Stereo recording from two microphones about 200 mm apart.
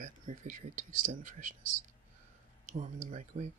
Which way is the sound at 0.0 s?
40° right (ahead or behind).